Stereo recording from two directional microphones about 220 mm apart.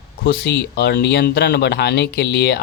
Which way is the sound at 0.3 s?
45° left (ahead or behind).